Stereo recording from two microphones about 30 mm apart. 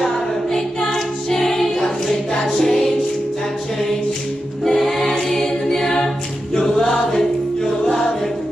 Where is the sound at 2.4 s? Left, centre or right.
Centre.